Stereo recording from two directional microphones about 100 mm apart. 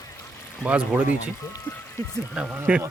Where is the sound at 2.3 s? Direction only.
10° right (ahead or behind).